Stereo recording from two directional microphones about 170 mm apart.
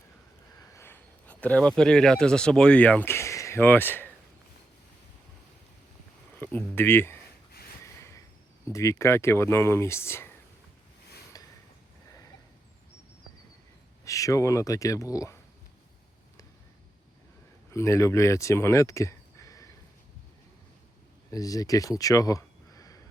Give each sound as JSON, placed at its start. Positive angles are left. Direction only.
{"t": 0.8, "sound": "speech", "side_deg": 10}
{"t": 6.4, "sound": "speech", "side_deg": 10}
{"t": 8.7, "sound": "speech", "side_deg": 20}
{"t": 11.3, "sound": "a sound", "side_deg": 20}
{"t": 14.0, "sound": "speech", "side_deg": 20}
{"t": 17.7, "sound": "speech", "side_deg": 15}
{"t": 21.2, "sound": "speech", "side_deg": 20}